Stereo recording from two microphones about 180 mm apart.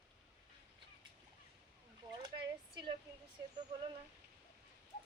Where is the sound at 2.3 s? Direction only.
20° right (ahead or behind).